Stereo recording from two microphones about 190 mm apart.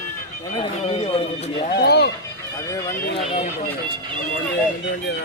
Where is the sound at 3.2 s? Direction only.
35° left (ahead or behind).